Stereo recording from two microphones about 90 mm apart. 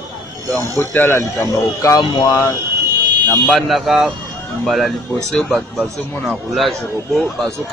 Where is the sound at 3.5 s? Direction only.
Centre (ahead or behind).